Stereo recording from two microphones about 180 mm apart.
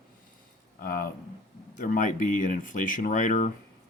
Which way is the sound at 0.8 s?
55° left (ahead or behind).